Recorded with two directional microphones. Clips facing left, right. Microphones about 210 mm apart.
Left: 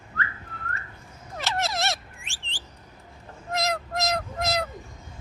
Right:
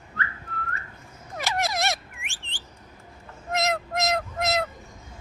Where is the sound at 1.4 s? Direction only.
15° right (ahead or behind).